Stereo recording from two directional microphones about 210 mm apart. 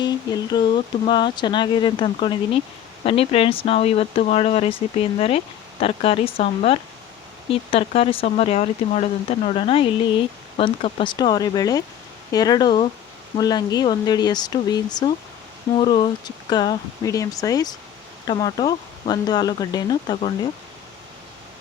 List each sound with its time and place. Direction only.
0.0 s speech: 20° left (ahead or behind)
5.8 s speech: 25° left (ahead or behind)